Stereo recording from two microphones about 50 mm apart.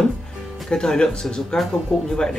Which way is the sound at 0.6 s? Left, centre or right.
Centre.